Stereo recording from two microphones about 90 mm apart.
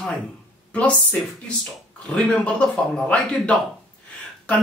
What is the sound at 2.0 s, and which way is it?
Speech, 10° left (ahead or behind).